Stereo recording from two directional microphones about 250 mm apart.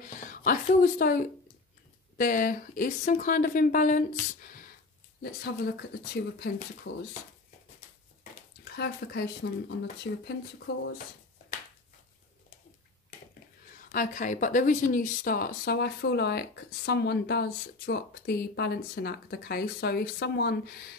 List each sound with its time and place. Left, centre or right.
0.0 s speech: left
6.1 s speech: left
8.2 s speech: left
13.9 s speech: left